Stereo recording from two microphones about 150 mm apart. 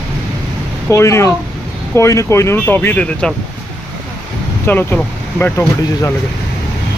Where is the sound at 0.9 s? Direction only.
20° left (ahead or behind).